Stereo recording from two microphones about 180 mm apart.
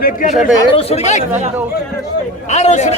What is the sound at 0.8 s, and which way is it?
Speech, 35° left (ahead or behind).